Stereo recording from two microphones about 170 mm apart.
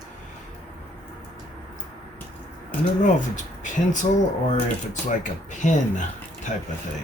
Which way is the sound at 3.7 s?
45° left (ahead or behind).